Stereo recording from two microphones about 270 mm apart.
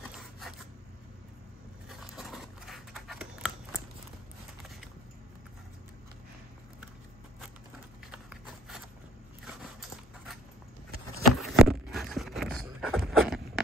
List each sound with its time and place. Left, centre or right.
0.1 s zipper: centre
1.9 s scissors: centre
8.1 s a sound: centre